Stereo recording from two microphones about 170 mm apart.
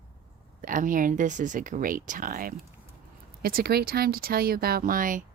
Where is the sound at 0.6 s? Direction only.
50° right (ahead or behind).